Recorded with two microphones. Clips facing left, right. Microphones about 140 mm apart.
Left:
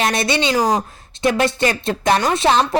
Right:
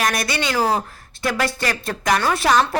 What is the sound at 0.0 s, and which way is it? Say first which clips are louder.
A woman's voice: left 4 dB; 25° left (ahead or behind).